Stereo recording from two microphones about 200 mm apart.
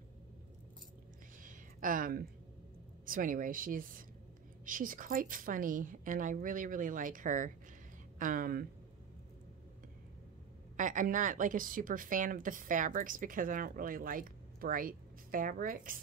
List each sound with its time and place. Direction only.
1.4 s a sound: 40° right (ahead or behind)
3.1 s a woman's voice: 45° right (ahead or behind)
10.8 s a woman's voice: 40° right (ahead or behind)